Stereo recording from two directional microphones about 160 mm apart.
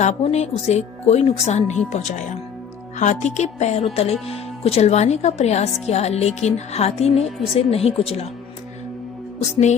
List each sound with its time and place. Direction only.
0.0 s a woman's voice: 40° left (ahead or behind)